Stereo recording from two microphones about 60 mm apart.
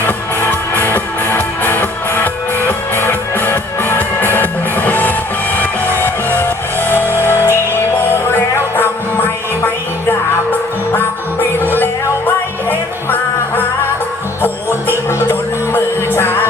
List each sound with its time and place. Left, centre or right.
0.0 s music: left
14.8 s music: left